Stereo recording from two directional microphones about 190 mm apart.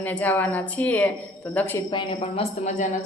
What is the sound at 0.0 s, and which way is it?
A woman's voice, 10° left (ahead or behind).